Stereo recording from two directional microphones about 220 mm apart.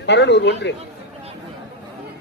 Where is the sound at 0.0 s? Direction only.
50° left (ahead or behind).